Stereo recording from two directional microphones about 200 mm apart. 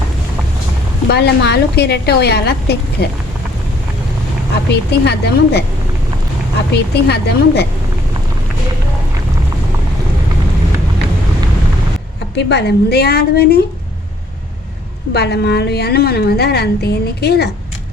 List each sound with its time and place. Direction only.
1.0 s a woman's voice: 55° left (ahead or behind)
4.9 s a woman's voice: 55° left (ahead or behind)
6.9 s a woman's voice: 55° left (ahead or behind)
12.4 s a woman's voice: 55° left (ahead or behind)
15.1 s a woman's voice: 55° left (ahead or behind)